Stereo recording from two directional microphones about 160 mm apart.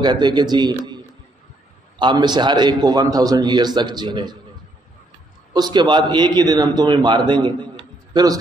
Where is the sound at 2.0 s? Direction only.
30° right (ahead or behind).